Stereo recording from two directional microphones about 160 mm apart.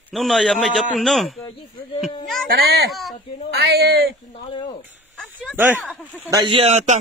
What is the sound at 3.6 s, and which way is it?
Speech, 85° right.